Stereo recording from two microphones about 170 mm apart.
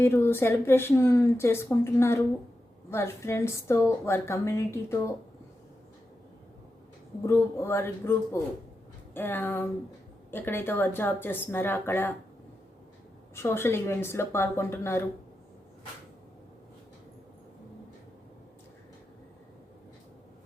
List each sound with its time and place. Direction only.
0.0 s a woman's voice: 15° left (ahead or behind)
7.3 s a woman's voice: 15° left (ahead or behind)
13.3 s a woman's voice: 15° left (ahead or behind)